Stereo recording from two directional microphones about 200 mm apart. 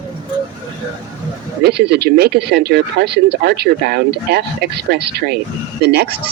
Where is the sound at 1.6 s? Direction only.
55° right (ahead or behind).